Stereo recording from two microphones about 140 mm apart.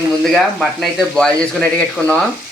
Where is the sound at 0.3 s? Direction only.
Centre (ahead or behind).